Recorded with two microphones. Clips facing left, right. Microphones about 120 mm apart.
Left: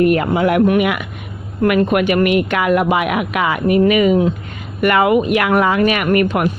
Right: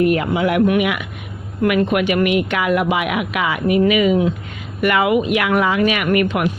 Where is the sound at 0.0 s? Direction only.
45° left (ahead or behind).